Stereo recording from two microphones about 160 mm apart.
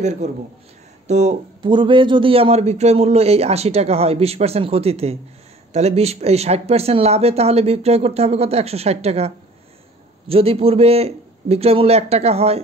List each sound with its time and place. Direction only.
0.0 s speech: 45° right (ahead or behind)
1.6 s speech: 30° right (ahead or behind)